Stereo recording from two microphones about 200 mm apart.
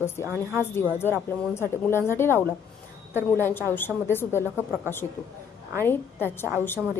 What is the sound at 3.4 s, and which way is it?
Speech, 10° left (ahead or behind).